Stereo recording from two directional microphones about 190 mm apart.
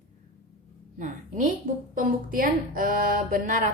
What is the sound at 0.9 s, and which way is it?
A woman's voice, 45° right (ahead or behind).